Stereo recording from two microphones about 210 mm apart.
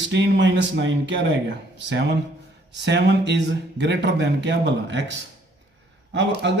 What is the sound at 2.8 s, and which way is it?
A man's voice, 55° right (ahead or behind).